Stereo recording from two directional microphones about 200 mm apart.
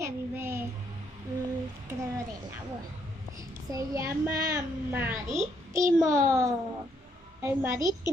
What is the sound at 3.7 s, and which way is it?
A child's voice, 15° right (ahead or behind).